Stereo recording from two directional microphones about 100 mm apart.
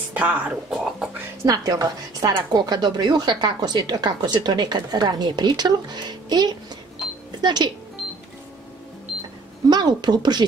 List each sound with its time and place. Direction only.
0.1 s speech: 15° right (ahead or behind)
1.4 s a woman's voice: 35° right (ahead or behind)
9.7 s a woman's voice: 45° right (ahead or behind)